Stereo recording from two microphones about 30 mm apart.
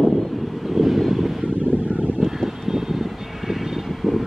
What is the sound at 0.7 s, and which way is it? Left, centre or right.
Vehicle, centre.